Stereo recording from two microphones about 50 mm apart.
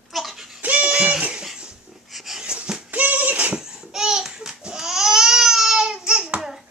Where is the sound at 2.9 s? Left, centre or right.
Right.